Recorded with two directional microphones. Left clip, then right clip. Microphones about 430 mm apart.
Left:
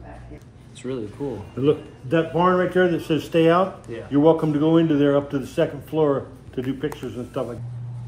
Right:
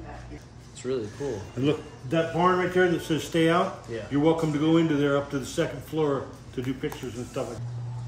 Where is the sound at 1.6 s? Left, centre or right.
Centre.